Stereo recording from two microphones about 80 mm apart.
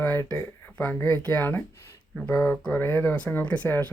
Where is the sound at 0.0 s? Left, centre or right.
Left.